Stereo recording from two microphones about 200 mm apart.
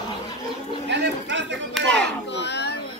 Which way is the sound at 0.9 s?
60° right (ahead or behind).